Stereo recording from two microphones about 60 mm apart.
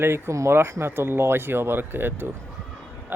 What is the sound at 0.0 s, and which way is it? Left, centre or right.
Speech, right.